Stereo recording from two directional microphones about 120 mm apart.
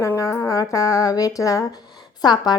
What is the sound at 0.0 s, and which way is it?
A woman's voice, 25° left (ahead or behind).